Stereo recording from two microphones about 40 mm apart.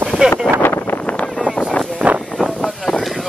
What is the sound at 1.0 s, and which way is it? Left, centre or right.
Vehicle, left.